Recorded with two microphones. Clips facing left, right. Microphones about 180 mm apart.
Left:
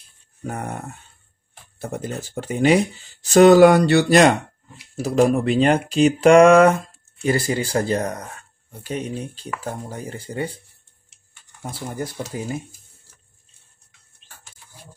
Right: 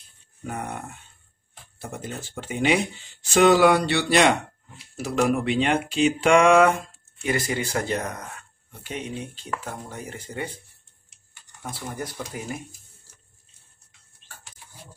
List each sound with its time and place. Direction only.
0.4 s speech: 40° left (ahead or behind)
12.3 s speech: 30° left (ahead or behind)